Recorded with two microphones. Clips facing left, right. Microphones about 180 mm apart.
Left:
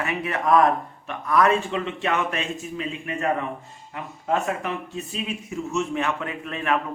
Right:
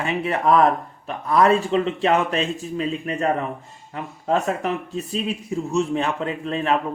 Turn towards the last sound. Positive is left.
turn(degrees=-30)  # may be behind; listen again after turning